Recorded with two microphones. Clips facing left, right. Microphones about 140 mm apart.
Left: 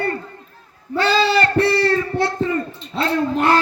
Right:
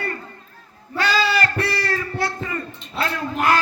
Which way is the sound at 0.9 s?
30° left (ahead or behind).